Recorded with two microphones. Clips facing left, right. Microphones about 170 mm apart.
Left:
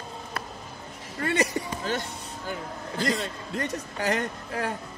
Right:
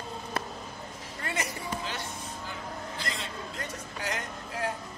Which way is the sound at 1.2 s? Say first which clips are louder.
Left 9 dB; 65° left (ahead or behind).